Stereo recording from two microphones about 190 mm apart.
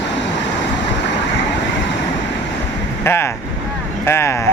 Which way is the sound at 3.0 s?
15° left (ahead or behind).